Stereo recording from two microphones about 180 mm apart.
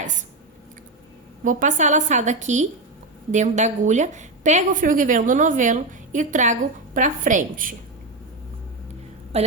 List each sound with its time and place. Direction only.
1.5 s a woman's voice: 45° right (ahead or behind)
9.3 s a woman's voice: 35° right (ahead or behind)